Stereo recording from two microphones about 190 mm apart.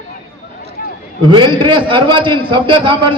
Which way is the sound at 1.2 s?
25° right (ahead or behind).